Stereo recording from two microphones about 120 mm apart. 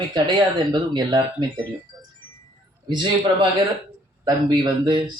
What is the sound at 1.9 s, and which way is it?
Music, 25° right (ahead or behind).